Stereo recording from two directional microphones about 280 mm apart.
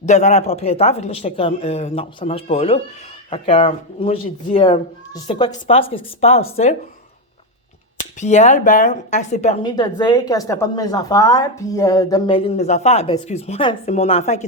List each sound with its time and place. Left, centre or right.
0.0 s a woman's voice: left
8.2 s a woman's voice: left